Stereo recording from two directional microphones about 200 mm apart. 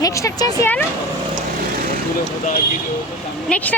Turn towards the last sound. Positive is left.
turn(degrees=5)  # may be behind; listen again after turning